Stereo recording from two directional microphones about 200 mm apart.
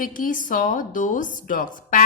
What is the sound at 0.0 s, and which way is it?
A woman's voice, 45° left (ahead or behind).